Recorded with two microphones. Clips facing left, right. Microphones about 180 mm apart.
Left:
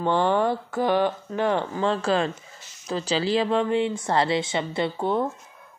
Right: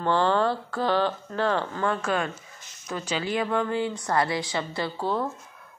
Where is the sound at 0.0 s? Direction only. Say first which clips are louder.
Left 1 dB; 15° left (ahead or behind).